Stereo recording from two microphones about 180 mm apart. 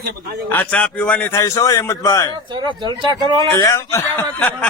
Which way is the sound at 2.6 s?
25° right (ahead or behind).